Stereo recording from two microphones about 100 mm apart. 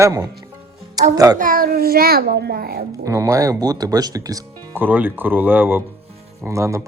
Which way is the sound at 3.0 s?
30° right (ahead or behind).